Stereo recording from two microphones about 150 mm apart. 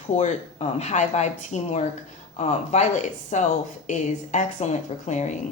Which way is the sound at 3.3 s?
50° left (ahead or behind).